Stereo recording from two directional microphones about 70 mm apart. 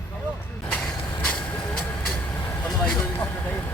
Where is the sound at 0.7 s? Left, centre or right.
Centre.